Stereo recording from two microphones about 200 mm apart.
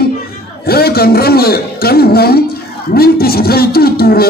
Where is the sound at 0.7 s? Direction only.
50° left (ahead or behind).